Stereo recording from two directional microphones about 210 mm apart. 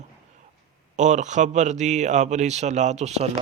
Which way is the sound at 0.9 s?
35° right (ahead or behind).